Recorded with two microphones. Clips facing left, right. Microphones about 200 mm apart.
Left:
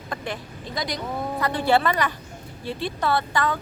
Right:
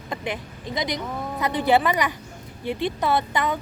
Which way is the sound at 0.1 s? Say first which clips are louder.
Right 2 dB; 20° right (ahead or behind).